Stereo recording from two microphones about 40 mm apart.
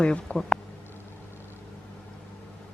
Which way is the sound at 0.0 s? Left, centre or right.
Left.